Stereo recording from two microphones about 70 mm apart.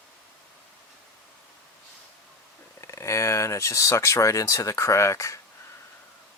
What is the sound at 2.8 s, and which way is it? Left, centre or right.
Speech, left.